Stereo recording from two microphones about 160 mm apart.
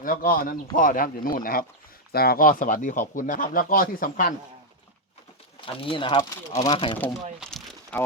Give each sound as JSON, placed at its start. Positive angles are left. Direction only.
{"t": 0.0, "sound": "speech", "side_deg": 65}
{"t": 5.5, "sound": "speech", "side_deg": 35}
{"t": 7.3, "sound": "crumpling", "side_deg": 0}